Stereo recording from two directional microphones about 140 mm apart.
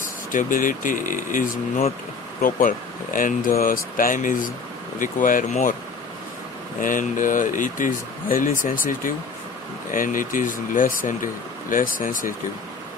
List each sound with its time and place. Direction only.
0.3 s speech: 70° left (ahead or behind)
6.8 s speech: 70° left (ahead or behind)